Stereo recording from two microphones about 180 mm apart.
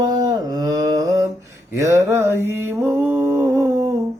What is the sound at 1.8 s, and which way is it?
Mantra, 15° right (ahead or behind).